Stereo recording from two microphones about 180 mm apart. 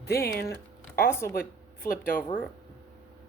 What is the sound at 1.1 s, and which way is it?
Speech, 15° left (ahead or behind).